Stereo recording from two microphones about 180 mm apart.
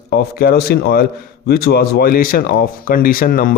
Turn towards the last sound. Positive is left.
turn(degrees=50)  # may be behind; listen again after turning